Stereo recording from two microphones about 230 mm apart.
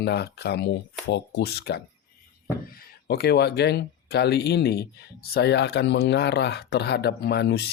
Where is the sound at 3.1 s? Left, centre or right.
Left.